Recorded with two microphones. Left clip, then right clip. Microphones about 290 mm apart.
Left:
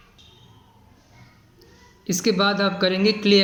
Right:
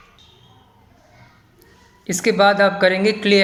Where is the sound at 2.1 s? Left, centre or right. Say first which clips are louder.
Right 6 dB; centre.